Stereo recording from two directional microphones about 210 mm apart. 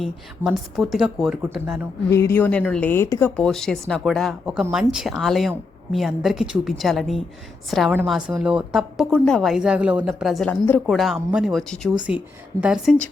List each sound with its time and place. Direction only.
0.0 s a woman's voice: centre (ahead or behind)
2.0 s a woman's voice: 15° left (ahead or behind)